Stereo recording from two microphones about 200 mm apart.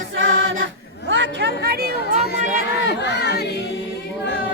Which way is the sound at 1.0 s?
65° right (ahead or behind).